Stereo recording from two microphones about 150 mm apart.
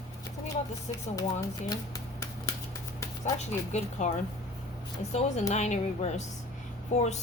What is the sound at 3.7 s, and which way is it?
A woman's voice, 50° left (ahead or behind).